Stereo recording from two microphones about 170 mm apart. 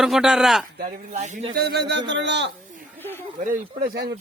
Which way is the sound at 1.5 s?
70° right (ahead or behind).